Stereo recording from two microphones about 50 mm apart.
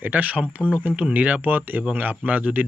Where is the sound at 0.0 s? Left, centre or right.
Right.